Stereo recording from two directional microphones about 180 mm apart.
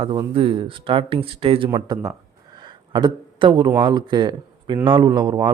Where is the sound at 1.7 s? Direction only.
20° right (ahead or behind).